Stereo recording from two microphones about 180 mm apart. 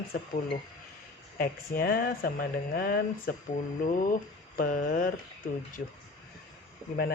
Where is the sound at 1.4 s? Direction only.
50° left (ahead or behind).